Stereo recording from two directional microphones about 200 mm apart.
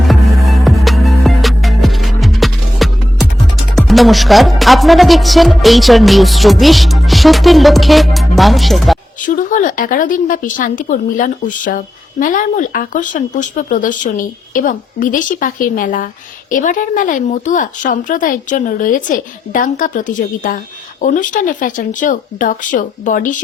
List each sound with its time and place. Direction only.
0.1 s music: centre (ahead or behind)
3.8 s speech: centre (ahead or behind)
9.2 s speech: 40° left (ahead or behind)